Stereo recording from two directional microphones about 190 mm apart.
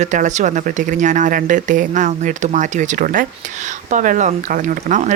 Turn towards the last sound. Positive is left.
turn(degrees=-40)  # may be behind; listen again after turning